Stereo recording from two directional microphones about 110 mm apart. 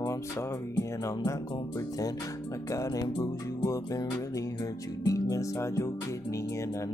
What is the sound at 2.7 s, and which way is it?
Music, 30° left (ahead or behind).